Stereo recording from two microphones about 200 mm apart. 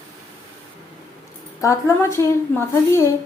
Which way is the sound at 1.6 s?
15° left (ahead or behind).